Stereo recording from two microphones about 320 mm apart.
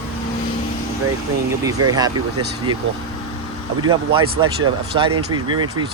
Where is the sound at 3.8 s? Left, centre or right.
Centre.